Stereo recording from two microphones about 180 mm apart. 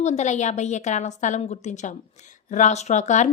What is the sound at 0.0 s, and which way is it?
A woman's voice, 40° left (ahead or behind).